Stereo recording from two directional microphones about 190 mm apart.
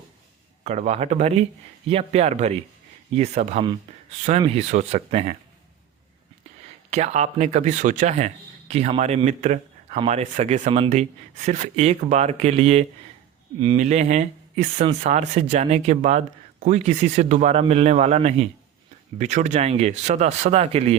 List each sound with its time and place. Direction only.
0.6 s speech: 35° right (ahead or behind)
6.9 s speech: 35° right (ahead or behind)